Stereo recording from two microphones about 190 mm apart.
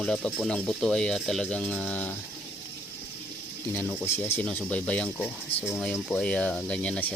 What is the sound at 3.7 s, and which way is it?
Speech, 10° left (ahead or behind).